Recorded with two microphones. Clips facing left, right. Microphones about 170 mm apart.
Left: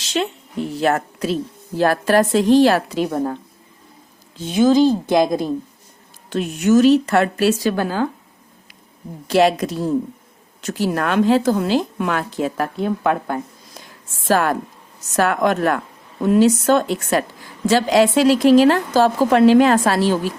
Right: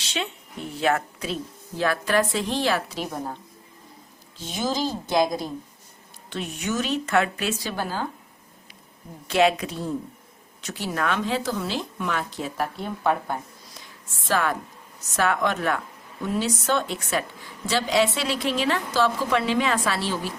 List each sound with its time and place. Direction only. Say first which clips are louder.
0.0 s a sound: left 8 dB; 40° left (ahead or behind)
0.8 s a woman's voice: left 4 dB; 40° left (ahead or behind)
4.4 s a woman's voice: left 13 dB; 60° left (ahead or behind)
6.6 s a woman's voice: left 15 dB; 45° left (ahead or behind)
9.2 s a woman's voice: left 5 dB; 40° left (ahead or behind); by 12.7 s 65° left (ahead or behind)
12.8 s a woman's voice: left 6 dB; 90° left
14.2 s a woman's voice: left 7 dB; 50° left (ahead or behind)